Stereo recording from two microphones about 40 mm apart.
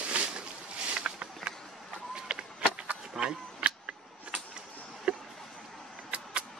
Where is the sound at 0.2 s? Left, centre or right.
Right.